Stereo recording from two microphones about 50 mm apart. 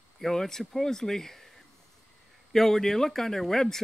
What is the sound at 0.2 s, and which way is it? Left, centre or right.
A man's voice, centre.